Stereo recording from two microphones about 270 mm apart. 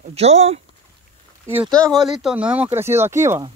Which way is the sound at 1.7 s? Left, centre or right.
Centre.